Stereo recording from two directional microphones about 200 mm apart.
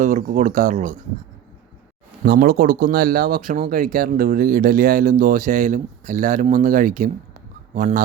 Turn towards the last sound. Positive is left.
turn(degrees=-40)  # may be behind; listen again after turning